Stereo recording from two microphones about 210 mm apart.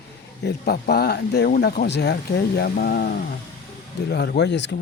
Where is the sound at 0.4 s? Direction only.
50° left (ahead or behind).